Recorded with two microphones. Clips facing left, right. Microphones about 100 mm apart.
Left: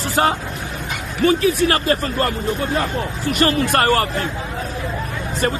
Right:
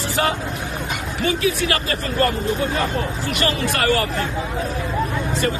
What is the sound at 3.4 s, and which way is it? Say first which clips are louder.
Speech: left 5 dB; 45° left (ahead or behind).